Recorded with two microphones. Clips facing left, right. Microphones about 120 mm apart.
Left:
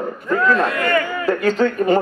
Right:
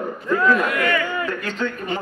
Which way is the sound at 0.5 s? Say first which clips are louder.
Left 3 dB; 30° left (ahead or behind).